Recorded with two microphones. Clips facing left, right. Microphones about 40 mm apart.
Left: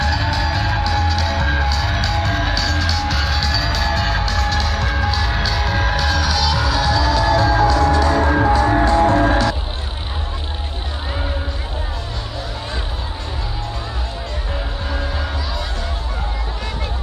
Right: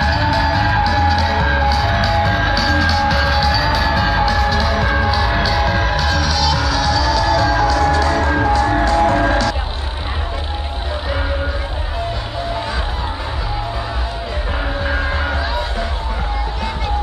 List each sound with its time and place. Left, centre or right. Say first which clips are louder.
0.0 s music: right 4 dB; centre
7.3 s music: even; right
14.9 s music: right 5 dB; right